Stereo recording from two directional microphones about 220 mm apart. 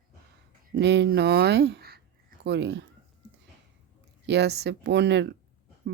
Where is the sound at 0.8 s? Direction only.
50° right (ahead or behind).